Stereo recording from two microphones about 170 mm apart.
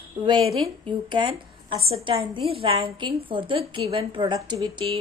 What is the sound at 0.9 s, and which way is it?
A woman's voice, 30° right (ahead or behind).